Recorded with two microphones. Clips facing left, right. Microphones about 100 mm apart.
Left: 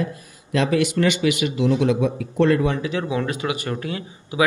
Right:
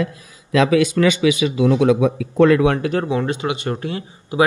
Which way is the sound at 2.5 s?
65° right (ahead or behind).